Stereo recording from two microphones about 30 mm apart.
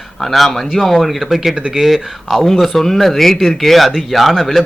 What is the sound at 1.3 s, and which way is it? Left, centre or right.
Speech, centre.